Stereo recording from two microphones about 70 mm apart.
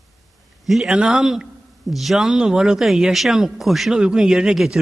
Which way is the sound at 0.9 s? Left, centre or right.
Centre.